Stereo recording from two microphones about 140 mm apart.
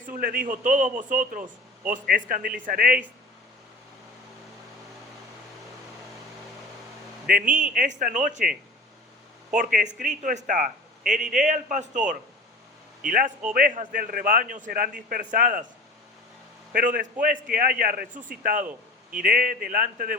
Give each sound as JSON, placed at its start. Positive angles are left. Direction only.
{"t": 0.0, "sound": "a man's voice", "side_deg": -85}
{"t": 7.3, "sound": "a man's voice", "side_deg": -80}
{"t": 7.7, "sound": "speech", "side_deg": -65}
{"t": 9.6, "sound": "a man's voice", "side_deg": -65}
{"t": 13.1, "sound": "a man's voice", "side_deg": -75}
{"t": 16.7, "sound": "a man's voice", "side_deg": -75}